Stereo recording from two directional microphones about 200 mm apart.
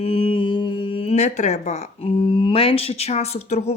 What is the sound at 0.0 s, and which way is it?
Speech, 30° left (ahead or behind).